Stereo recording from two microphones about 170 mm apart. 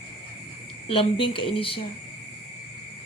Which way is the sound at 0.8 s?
30° left (ahead or behind).